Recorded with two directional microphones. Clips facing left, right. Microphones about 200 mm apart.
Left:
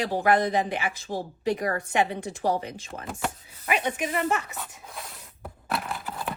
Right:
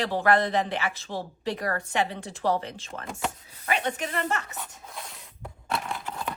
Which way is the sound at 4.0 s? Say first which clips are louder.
Left 3 dB; 10° left (ahead or behind).